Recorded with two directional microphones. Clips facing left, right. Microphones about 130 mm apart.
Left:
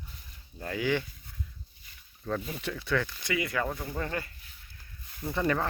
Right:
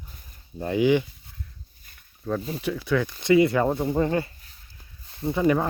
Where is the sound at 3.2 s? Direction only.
30° right (ahead or behind).